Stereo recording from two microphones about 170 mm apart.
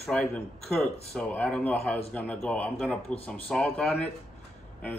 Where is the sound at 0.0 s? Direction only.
5° left (ahead or behind).